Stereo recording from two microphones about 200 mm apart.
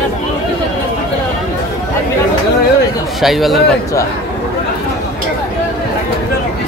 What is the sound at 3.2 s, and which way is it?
Speech, centre (ahead or behind).